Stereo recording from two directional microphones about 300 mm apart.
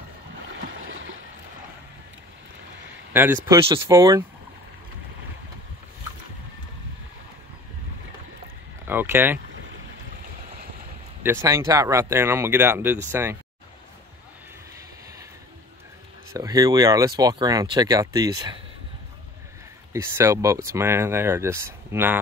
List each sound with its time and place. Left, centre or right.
0.8 s a sound: right
3.1 s a sound: centre
3.4 s speech: centre
8.8 s speech: centre
11.2 s speech: centre
16.3 s speech: centre
19.9 s speech: centre